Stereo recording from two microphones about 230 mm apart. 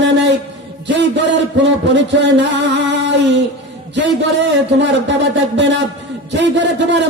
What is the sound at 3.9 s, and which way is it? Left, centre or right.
Speech, right.